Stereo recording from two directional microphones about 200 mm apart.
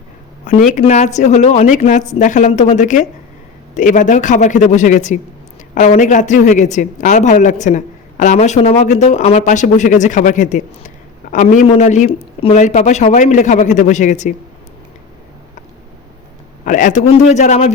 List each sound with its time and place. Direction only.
0.4 s speech: 40° left (ahead or behind)
16.6 s speech: 40° left (ahead or behind)